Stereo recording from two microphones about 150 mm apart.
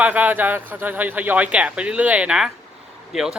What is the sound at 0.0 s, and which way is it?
A man's voice, 10° right (ahead or behind).